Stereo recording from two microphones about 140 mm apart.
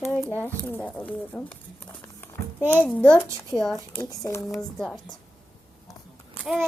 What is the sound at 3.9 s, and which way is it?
Speech, 20° left (ahead or behind).